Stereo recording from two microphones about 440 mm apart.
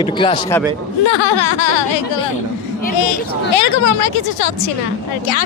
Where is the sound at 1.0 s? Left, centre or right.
Left.